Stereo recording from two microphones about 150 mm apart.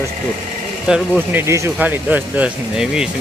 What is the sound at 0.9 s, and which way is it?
Speech, 10° right (ahead or behind).